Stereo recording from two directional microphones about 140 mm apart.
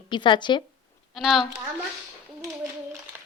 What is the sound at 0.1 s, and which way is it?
Speech, 35° left (ahead or behind).